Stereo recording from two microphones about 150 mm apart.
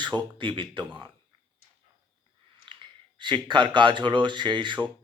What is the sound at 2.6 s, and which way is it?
Speech, 30° right (ahead or behind).